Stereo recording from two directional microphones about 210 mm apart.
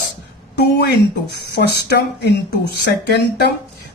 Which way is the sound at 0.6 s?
55° left (ahead or behind).